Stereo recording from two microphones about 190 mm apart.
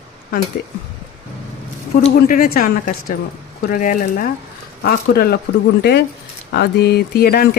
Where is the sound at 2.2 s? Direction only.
45° left (ahead or behind).